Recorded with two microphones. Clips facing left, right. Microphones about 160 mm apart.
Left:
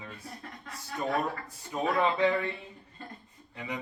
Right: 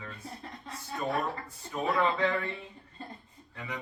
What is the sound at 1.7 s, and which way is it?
Speech, 20° left (ahead or behind).